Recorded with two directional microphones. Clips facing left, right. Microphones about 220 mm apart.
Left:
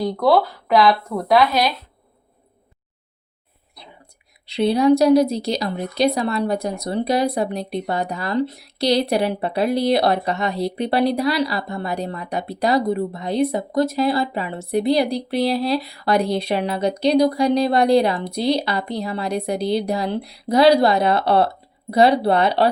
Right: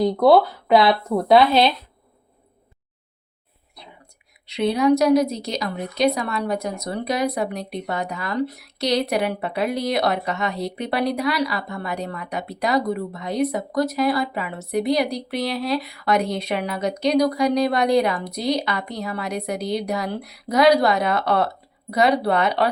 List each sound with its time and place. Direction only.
0.0 s speech: 20° right (ahead or behind)
4.4 s a woman's voice: 30° left (ahead or behind)